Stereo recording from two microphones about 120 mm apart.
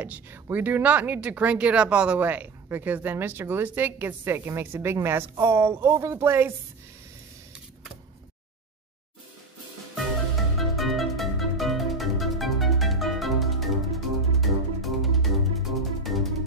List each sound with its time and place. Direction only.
0.0 s speech: 15° right (ahead or behind)
9.9 s music: centre (ahead or behind)